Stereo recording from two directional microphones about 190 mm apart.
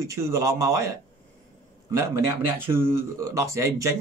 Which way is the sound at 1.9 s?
15° right (ahead or behind).